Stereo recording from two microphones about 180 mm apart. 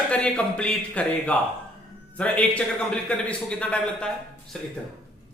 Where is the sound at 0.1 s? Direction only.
5° left (ahead or behind).